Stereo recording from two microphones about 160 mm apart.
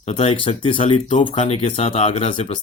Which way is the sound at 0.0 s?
35° left (ahead or behind).